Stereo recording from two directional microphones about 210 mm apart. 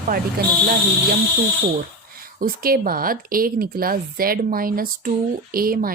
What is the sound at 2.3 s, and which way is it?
Speech, 45° right (ahead or behind).